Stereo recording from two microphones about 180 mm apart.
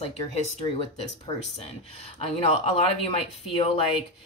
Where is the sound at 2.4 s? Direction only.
35° left (ahead or behind).